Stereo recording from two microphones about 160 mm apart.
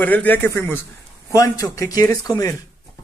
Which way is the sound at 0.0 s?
10° left (ahead or behind).